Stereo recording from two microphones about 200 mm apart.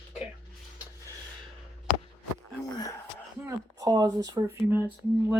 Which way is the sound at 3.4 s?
15° right (ahead or behind).